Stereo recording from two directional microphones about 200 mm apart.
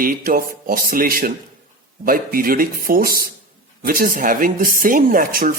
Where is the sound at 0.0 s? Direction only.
45° right (ahead or behind).